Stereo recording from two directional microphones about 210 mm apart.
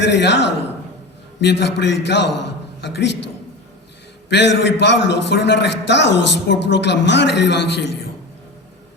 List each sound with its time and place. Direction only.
0.1 s a man's voice: 55° left (ahead or behind)
4.3 s a man's voice: 55° left (ahead or behind)